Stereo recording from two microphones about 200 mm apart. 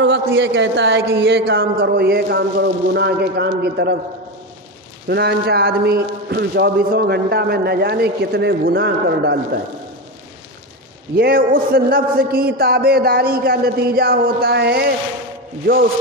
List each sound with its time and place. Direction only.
0.0 s speech: 65° right (ahead or behind)
5.0 s a man's voice: 55° right (ahead or behind)
11.1 s a man's voice: 50° right (ahead or behind)